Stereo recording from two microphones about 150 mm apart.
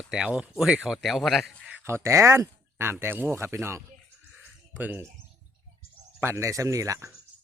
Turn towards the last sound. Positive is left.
turn(degrees=-20)  # may be behind; listen again after turning